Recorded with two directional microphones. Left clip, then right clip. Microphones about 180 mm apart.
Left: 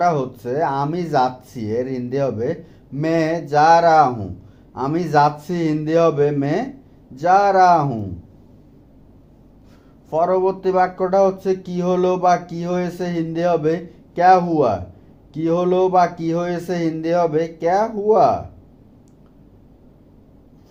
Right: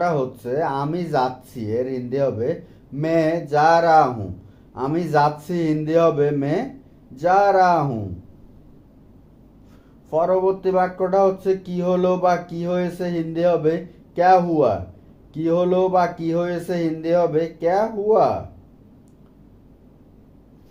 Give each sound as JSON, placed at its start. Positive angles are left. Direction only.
{"t": 0.0, "sound": "speech", "side_deg": 35}
{"t": 10.1, "sound": "speech", "side_deg": 35}